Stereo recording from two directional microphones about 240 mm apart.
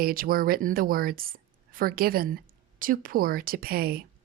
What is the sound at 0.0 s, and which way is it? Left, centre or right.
A woman's voice, right.